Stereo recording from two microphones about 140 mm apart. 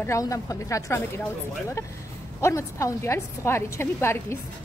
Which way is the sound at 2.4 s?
20° left (ahead or behind).